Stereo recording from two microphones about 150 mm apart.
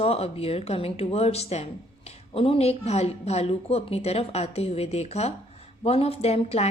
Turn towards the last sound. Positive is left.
turn(degrees=45)  # may be behind; listen again after turning